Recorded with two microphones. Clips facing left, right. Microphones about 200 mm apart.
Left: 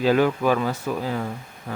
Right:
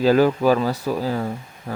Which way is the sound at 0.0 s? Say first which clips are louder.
Right 3 dB; 40° right (ahead or behind).